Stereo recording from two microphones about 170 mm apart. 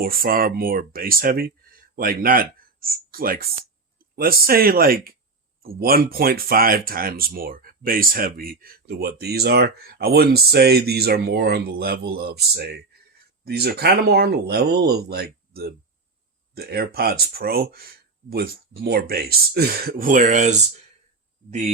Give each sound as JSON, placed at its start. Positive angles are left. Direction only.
{"t": 0.0, "sound": "speech", "side_deg": -60}